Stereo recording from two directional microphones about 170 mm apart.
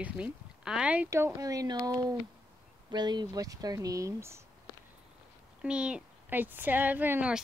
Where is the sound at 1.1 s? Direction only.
20° right (ahead or behind).